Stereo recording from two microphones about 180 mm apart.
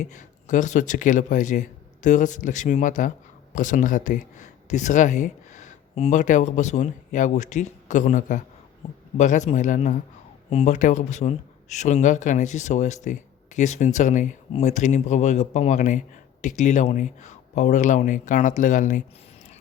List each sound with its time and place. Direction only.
0.0 s speech: 45° left (ahead or behind)